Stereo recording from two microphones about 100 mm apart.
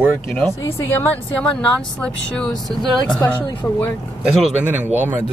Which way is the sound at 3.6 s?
25° left (ahead or behind).